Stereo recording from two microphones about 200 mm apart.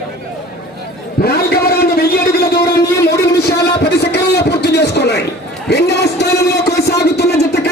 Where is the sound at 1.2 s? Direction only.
50° left (ahead or behind).